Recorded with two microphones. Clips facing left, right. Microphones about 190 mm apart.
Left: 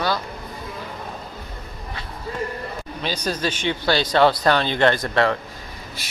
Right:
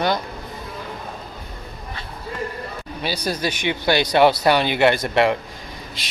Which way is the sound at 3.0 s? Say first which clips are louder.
Right 1 dB; 10° right (ahead or behind).